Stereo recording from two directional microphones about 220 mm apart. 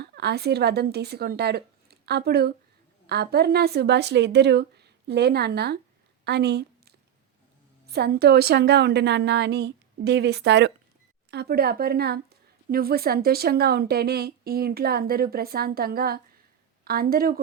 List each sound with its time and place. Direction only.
0.0 s a woman's voice: 50° right (ahead or behind)
6.2 s a sound: 50° right (ahead or behind)
7.9 s a woman's voice: 45° right (ahead or behind)